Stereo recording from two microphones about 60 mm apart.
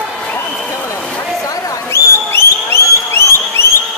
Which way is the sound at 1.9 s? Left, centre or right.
Left.